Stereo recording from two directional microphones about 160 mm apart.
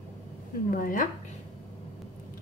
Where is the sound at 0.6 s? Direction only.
60° left (ahead or behind).